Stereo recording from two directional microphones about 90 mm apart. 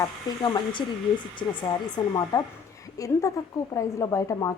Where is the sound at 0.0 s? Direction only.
55° left (ahead or behind).